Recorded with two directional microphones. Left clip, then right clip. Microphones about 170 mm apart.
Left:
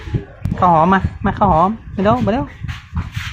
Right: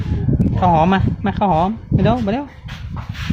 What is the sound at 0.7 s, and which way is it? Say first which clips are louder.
Speech: left 3 dB; 20° right (ahead or behind).